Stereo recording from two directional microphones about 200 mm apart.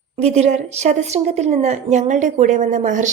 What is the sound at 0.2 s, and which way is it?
A woman's voice, 35° right (ahead or behind).